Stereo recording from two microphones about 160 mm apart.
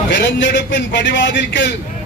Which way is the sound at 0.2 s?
90° left.